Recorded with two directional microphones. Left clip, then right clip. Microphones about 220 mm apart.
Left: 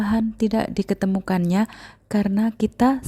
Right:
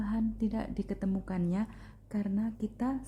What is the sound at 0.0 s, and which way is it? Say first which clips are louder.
Speech: left 12 dB; 35° left (ahead or behind).